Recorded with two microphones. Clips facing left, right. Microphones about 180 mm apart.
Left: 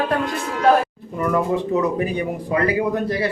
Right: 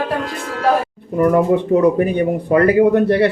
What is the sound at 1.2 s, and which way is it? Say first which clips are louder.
Speech: right 7 dB; 50° right (ahead or behind).